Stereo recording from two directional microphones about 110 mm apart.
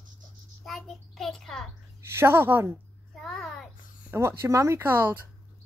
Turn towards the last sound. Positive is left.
turn(degrees=-20)  # may be behind; listen again after turning